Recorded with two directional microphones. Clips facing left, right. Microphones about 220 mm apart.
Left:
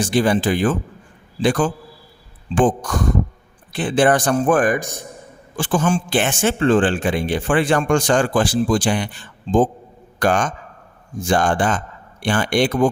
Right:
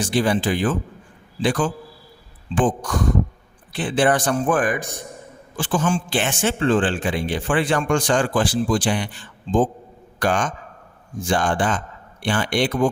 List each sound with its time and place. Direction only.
0.0 s speech: 50° left (ahead or behind)
10.2 s speech: 45° left (ahead or behind)